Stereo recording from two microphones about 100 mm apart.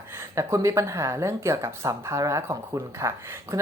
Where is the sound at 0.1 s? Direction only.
25° right (ahead or behind).